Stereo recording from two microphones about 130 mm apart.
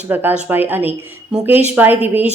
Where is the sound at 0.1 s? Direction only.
15° right (ahead or behind).